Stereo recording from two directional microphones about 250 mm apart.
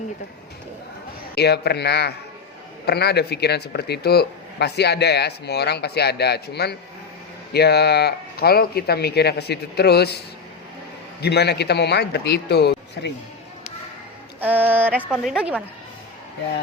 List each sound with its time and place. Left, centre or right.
1.4 s speech: left
14.4 s a woman's voice: centre